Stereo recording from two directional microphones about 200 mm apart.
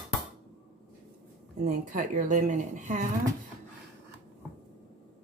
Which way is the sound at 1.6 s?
40° right (ahead or behind).